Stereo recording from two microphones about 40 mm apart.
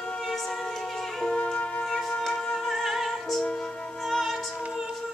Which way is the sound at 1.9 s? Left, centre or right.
Centre.